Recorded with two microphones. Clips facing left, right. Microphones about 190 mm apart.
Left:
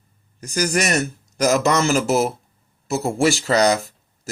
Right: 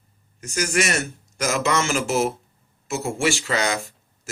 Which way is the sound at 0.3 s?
35° left (ahead or behind).